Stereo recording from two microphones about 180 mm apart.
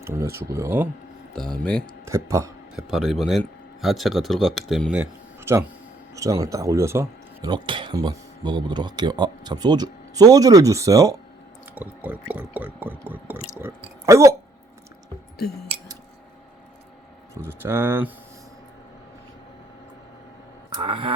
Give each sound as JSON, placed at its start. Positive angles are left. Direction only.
{"t": 0.0, "sound": "water", "side_deg": -15}
{"t": 1.4, "sound": "speech", "side_deg": 5}
{"t": 2.0, "sound": "water", "side_deg": -15}
{"t": 2.7, "sound": "speech", "side_deg": 0}
{"t": 11.7, "sound": "water", "side_deg": -10}
{"t": 17.4, "sound": "water", "side_deg": -10}
{"t": 20.7, "sound": "speech", "side_deg": -30}